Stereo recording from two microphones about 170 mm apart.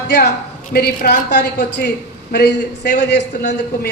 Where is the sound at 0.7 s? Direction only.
65° left (ahead or behind).